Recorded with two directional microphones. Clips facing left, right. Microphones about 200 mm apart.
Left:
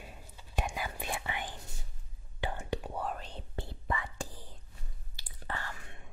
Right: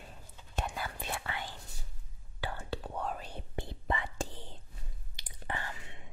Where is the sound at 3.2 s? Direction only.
10° right (ahead or behind).